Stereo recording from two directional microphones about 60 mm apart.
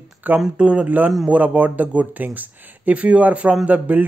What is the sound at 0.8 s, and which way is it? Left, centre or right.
Speech, right.